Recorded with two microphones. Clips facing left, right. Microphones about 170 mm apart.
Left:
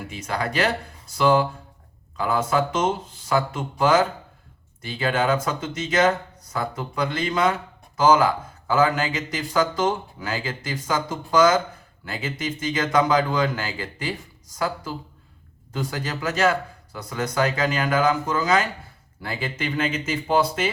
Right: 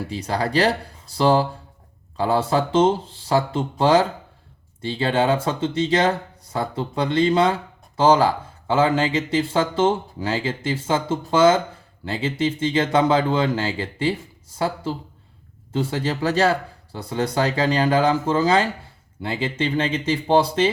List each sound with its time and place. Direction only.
0.1 s speech: 35° right (ahead or behind)